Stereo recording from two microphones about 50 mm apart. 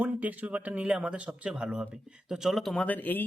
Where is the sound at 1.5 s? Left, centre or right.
Centre.